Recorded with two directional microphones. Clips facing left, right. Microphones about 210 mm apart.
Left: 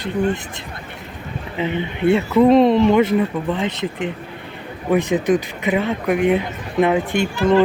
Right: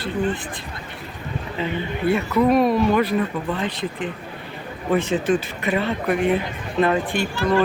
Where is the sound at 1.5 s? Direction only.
20° left (ahead or behind).